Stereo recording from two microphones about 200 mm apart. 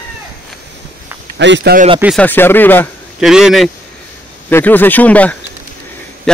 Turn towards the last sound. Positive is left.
turn(degrees=5)  # may be behind; listen again after turning